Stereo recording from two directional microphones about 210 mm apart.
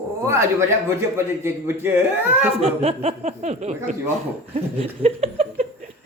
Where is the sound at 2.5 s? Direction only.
30° right (ahead or behind).